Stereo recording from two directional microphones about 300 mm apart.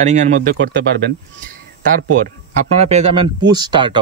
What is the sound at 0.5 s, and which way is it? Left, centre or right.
Speech, right.